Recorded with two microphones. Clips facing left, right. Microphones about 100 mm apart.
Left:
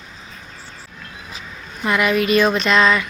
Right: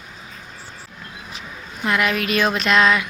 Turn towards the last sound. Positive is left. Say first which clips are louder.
# left 1 dB
turn(degrees=-5)  # may be behind; listen again after turning